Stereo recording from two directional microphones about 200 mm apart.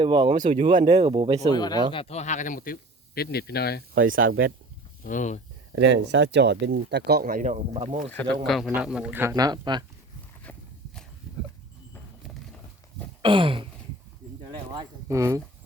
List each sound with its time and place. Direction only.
0.0 s speech: 25° right (ahead or behind)
0.3 s speech: 40° right (ahead or behind)
0.9 s speech: 30° right (ahead or behind)
1.5 s speech: 20° left (ahead or behind); by 3.8 s 50° left (ahead or behind)
4.1 s speech: 45° right (ahead or behind)
5.0 s speech: 40° left (ahead or behind)
5.7 s speech: 65° right (ahead or behind); by 8.1 s 35° right (ahead or behind)
8.4 s speech: centre (ahead or behind); by 9.8 s 20° right (ahead or behind)
10.5 s walk: 5° left (ahead or behind)
13.2 s speech: 25° right (ahead or behind)
14.8 s speech: 15° right (ahead or behind)